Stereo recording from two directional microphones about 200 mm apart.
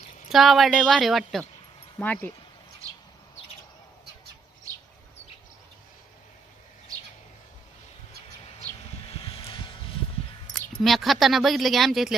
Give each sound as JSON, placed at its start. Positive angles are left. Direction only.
{"t": 0.3, "sound": "speech", "side_deg": 0}
{"t": 9.0, "sound": "vehicle", "side_deg": 25}
{"t": 10.5, "sound": "speech", "side_deg": 0}